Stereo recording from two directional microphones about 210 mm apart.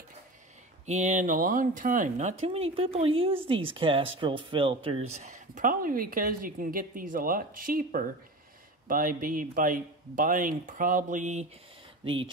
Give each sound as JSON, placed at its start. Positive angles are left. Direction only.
{"t": 0.8, "sound": "speech", "side_deg": -35}
{"t": 12.0, "sound": "speech", "side_deg": -25}